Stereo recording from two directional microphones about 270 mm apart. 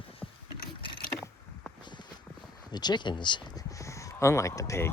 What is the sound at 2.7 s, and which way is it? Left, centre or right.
Speech, centre.